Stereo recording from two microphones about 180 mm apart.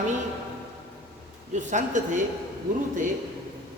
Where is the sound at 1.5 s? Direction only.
40° right (ahead or behind).